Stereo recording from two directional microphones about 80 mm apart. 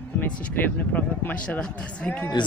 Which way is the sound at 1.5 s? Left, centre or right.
Centre.